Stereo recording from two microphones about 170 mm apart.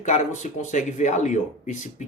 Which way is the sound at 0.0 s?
45° left (ahead or behind).